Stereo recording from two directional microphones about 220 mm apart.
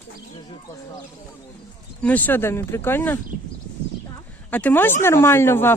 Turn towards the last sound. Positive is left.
turn(degrees=10)  # may be behind; listen again after turning